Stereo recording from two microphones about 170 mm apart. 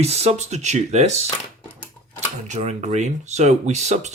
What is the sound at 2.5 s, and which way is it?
Speech, 45° right (ahead or behind).